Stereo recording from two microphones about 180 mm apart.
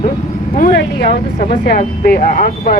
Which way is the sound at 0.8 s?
65° left (ahead or behind).